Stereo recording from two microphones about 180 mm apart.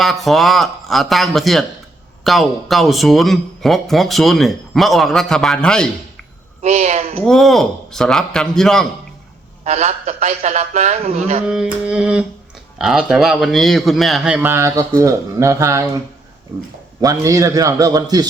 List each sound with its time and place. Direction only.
0.0 s speech: centre (ahead or behind)
6.6 s a man's voice: 40° right (ahead or behind)
7.3 s speech: centre (ahead or behind)
9.6 s a man's voice: 40° right (ahead or behind)
11.4 s speech: 5° right (ahead or behind)
17.0 s a man's voice: 20° right (ahead or behind)